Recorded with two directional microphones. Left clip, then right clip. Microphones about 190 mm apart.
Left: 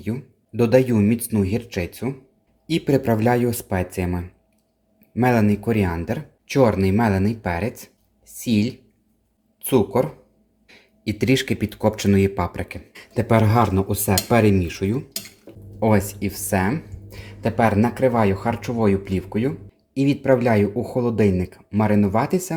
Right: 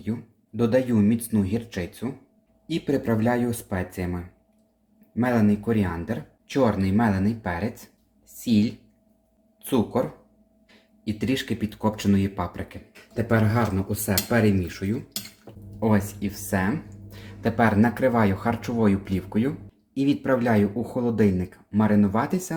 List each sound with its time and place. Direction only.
0.5 s speech: 40° left (ahead or behind)
13.1 s speech: 50° left (ahead or behind)
15.8 s speech: 40° left (ahead or behind)